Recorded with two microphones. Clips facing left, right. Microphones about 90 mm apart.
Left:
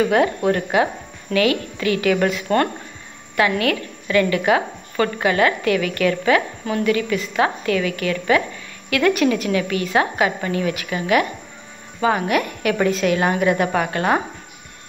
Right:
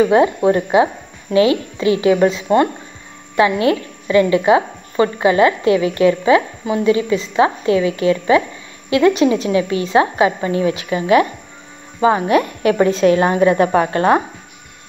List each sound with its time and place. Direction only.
0.0 s a woman's voice: 20° right (ahead or behind)